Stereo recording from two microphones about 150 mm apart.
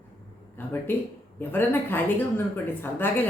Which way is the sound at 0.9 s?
15° left (ahead or behind).